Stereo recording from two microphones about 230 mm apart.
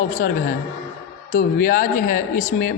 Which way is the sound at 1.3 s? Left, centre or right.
Left.